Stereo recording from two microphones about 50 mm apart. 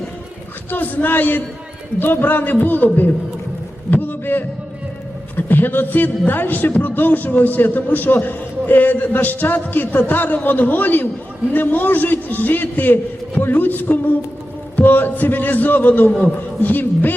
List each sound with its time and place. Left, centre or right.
0.7 s a man's voice: left
3.9 s heart sounds: left
5.5 s a man's voice: left